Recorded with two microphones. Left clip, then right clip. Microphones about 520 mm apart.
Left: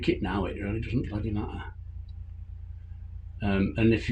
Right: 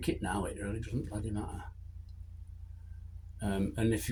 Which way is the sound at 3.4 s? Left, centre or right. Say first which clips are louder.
Left 7 dB; right.